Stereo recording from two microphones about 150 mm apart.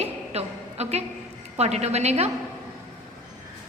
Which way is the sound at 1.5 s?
45° right (ahead or behind).